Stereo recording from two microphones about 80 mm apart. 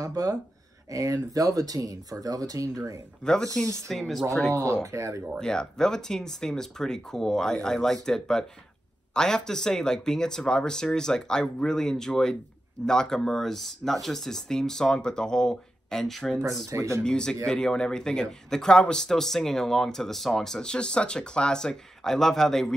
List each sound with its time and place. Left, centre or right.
0.0 s speech: right
4.1 s speech: centre
4.5 s speech: right
5.4 s speech: centre
16.7 s speech: right
17.0 s speech: centre